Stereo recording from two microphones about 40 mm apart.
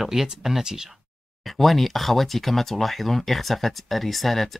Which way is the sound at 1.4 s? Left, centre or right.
Centre.